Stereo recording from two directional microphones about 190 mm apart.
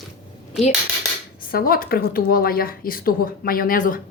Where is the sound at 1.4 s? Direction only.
50° left (ahead or behind).